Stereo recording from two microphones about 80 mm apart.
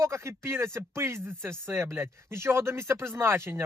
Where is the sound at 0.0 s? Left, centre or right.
Right.